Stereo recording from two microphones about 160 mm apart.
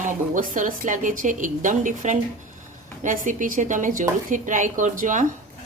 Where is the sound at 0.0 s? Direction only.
55° right (ahead or behind).